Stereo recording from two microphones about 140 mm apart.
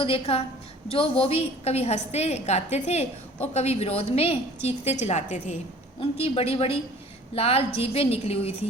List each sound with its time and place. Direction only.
0.0 s a woman's voice: 45° left (ahead or behind)
6.0 s a woman's voice: 45° left (ahead or behind)